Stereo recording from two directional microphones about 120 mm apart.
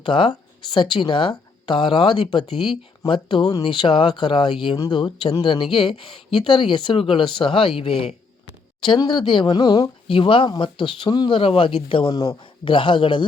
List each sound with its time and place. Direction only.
0.0 s speech: 45° left (ahead or behind)